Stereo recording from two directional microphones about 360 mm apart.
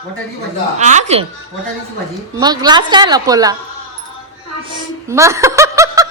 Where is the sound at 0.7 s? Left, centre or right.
Centre.